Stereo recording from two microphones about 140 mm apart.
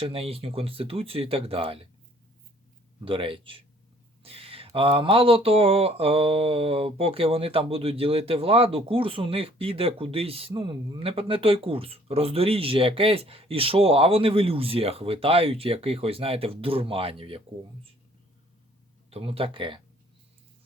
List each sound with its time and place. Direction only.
0.0 s speech: 40° right (ahead or behind)
3.0 s speech: 40° right (ahead or behind)
19.1 s speech: 45° right (ahead or behind)